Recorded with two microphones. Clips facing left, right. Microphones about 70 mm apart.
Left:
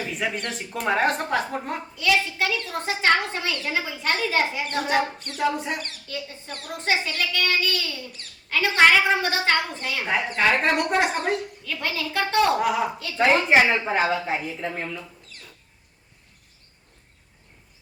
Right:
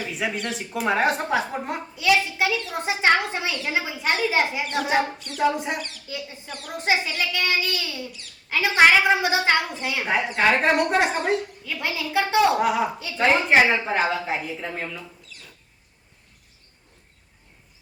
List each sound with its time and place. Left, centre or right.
0.1 s a woman's voice: centre
2.0 s a woman's voice: centre